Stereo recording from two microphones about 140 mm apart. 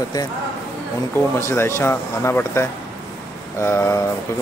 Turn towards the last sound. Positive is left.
turn(degrees=20)  # may be behind; listen again after turning